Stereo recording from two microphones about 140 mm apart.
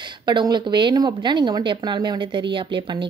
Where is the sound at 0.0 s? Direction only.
35° right (ahead or behind).